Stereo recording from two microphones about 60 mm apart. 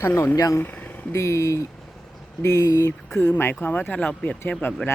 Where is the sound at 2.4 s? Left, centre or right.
Left.